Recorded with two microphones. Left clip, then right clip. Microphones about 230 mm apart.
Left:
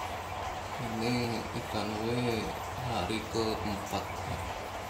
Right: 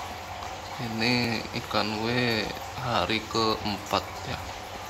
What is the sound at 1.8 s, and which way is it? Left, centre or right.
Speech, centre.